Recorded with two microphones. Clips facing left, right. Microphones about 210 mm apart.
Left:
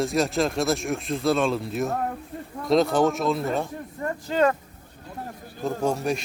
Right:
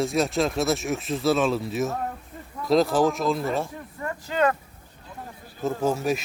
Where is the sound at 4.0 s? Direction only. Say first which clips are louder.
Left 2 dB; 35° left (ahead or behind).